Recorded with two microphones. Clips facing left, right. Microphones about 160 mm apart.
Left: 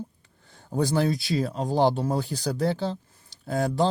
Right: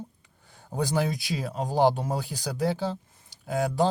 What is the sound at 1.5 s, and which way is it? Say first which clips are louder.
Speech: right 2 dB; 10° right (ahead or behind).